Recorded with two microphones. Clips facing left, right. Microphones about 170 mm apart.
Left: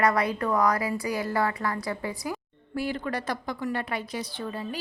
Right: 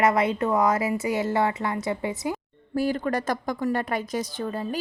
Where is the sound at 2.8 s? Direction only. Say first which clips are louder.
Right 5 dB; 40° right (ahead or behind).